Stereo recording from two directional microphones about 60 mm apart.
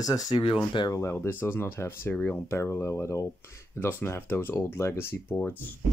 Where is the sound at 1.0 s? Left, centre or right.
Left.